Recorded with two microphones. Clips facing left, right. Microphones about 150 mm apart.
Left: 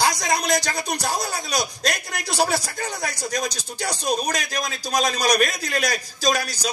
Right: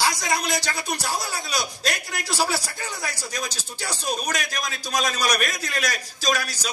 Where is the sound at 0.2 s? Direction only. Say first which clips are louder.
Left 3 dB; 40° left (ahead or behind).